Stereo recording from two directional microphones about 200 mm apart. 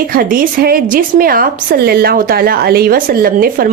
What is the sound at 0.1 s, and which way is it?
A woman's voice, 45° right (ahead or behind).